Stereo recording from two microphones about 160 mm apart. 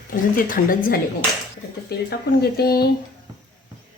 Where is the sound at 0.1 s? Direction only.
65° left (ahead or behind).